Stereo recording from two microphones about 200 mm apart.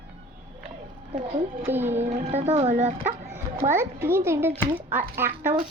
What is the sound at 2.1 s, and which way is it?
Speech, 30° right (ahead or behind).